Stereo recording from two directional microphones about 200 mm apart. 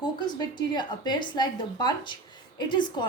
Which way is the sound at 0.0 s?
20° left (ahead or behind).